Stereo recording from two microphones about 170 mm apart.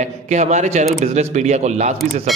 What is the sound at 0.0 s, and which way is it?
A man's voice, 45° right (ahead or behind).